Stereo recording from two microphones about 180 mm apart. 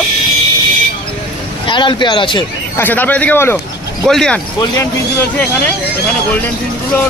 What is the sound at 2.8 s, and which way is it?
Speech, 10° left (ahead or behind).